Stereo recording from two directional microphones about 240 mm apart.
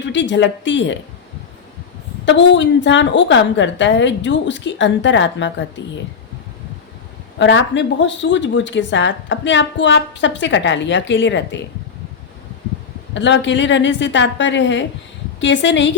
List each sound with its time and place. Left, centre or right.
0.0 s speech: left
2.2 s speech: left
7.3 s speech: left
13.1 s speech: left